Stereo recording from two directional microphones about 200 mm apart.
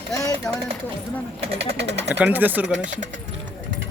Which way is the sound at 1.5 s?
60° right (ahead or behind).